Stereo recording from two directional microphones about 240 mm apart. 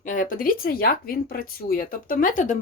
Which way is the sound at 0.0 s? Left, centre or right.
Left.